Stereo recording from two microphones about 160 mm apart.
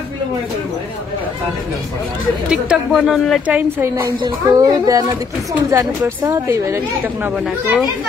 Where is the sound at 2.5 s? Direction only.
5° right (ahead or behind).